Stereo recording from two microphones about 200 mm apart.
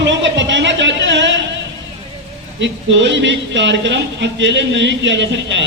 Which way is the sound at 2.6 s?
65° right (ahead or behind).